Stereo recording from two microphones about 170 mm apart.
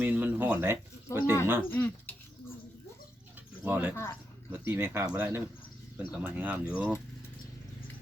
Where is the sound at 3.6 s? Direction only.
10° right (ahead or behind).